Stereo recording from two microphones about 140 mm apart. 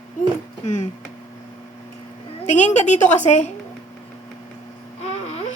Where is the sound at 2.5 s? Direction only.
55° left (ahead or behind).